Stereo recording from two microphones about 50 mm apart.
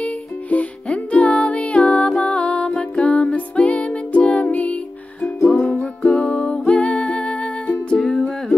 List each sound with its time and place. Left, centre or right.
0.0 s music: left
8.0 s music: centre